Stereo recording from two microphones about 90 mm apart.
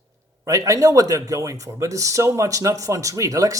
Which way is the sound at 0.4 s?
40° right (ahead or behind).